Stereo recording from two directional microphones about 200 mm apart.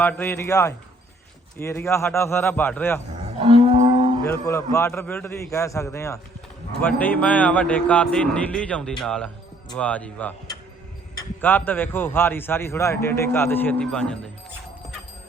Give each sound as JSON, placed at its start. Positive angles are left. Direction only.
{"t": 0.0, "sound": "a man's voice", "side_deg": 10}
{"t": 3.4, "sound": "cattle", "side_deg": -30}
{"t": 4.3, "sound": "a man's voice", "side_deg": 15}
{"t": 11.3, "sound": "a man's voice", "side_deg": 10}